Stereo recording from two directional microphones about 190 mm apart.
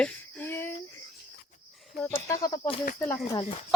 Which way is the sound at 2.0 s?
20° left (ahead or behind).